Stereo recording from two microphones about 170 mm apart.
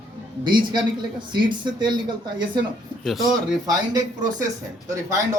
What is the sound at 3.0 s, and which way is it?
Speech, centre (ahead or behind).